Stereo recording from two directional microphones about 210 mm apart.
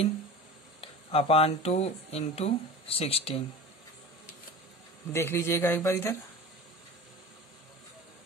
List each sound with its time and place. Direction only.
0.7 s speech: 25° left (ahead or behind)
5.1 s speech: 10° left (ahead or behind)